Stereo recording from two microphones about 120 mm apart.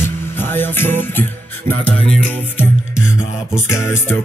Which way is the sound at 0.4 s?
15° left (ahead or behind).